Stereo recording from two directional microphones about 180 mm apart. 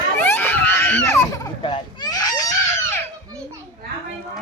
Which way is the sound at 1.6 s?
25° left (ahead or behind).